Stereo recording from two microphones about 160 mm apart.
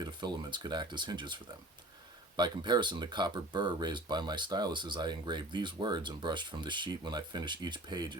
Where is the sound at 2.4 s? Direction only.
30° right (ahead or behind).